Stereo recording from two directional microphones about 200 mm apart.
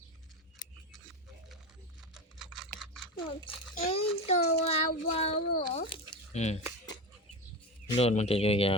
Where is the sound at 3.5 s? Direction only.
25° left (ahead or behind).